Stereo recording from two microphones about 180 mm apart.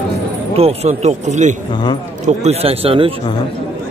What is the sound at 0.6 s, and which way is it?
A man's voice, 35° right (ahead or behind).